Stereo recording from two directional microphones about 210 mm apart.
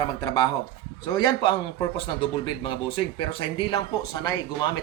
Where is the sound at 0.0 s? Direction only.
20° left (ahead or behind).